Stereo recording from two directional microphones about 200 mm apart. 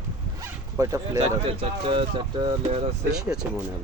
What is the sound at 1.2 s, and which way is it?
Speech, 30° right (ahead or behind).